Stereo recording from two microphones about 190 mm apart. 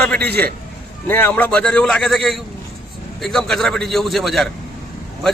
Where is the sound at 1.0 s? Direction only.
10° left (ahead or behind).